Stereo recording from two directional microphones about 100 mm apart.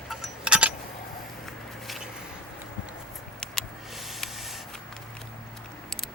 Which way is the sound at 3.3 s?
5° left (ahead or behind).